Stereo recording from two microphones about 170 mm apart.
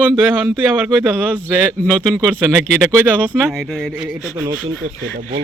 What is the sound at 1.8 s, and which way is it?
Speech, 5° left (ahead or behind).